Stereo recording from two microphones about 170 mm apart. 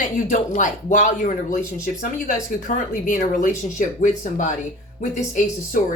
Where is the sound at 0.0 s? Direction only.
50° left (ahead or behind).